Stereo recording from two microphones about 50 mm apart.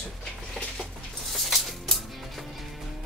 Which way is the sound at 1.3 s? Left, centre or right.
Centre.